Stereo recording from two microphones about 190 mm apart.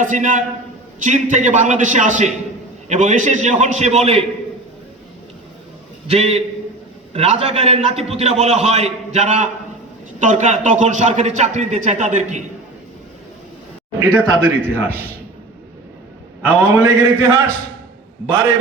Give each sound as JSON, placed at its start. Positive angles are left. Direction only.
{"t": 0.0, "sound": "a man's voice", "side_deg": -40}
{"t": 6.1, "sound": "a man's voice", "side_deg": -30}
{"t": 14.2, "sound": "a man's voice", "side_deg": -10}
{"t": 16.4, "sound": "a man's voice", "side_deg": -10}